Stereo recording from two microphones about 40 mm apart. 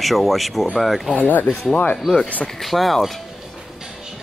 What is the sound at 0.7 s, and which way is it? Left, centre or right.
Speech, centre.